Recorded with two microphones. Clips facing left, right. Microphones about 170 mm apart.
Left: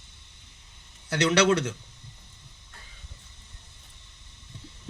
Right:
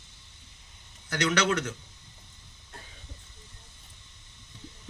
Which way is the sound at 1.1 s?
30° left (ahead or behind).